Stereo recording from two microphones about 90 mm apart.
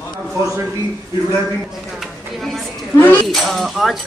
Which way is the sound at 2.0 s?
Centre (ahead or behind).